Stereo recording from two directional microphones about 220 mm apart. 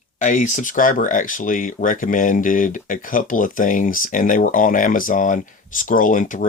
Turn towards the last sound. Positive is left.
turn(degrees=35)  # may be behind; listen again after turning